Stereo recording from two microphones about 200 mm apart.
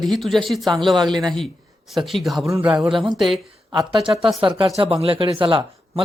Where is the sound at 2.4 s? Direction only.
10° right (ahead or behind).